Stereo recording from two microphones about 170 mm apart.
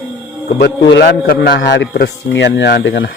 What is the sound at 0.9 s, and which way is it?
A man's voice, 70° left (ahead or behind).